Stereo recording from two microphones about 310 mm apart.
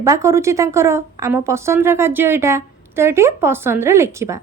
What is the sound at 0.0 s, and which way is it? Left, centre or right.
A woman's voice, centre.